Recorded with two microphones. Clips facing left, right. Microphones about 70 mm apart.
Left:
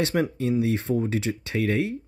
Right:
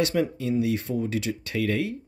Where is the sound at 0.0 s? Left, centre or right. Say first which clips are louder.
Even; left.